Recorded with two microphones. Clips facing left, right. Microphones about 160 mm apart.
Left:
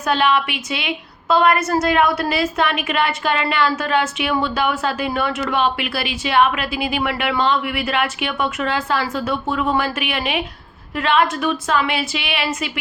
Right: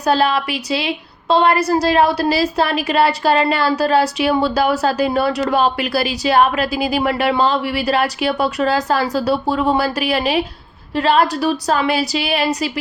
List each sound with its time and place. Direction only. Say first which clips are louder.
0.0 s a woman's voice: right 2 dB; 35° right (ahead or behind)